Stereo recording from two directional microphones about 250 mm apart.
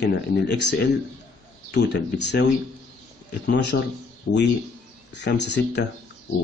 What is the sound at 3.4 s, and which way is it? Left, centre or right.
Speech, left.